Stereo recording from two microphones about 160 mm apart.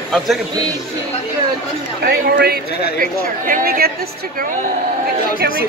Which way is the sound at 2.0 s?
75° right (ahead or behind).